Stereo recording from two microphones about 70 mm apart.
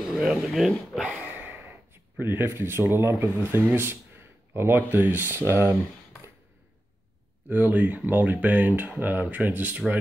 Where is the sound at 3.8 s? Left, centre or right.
Right.